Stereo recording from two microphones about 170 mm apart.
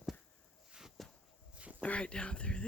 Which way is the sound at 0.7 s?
Centre (ahead or behind).